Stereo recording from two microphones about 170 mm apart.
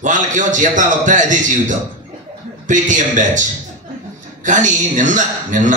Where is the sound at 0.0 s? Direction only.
50° right (ahead or behind).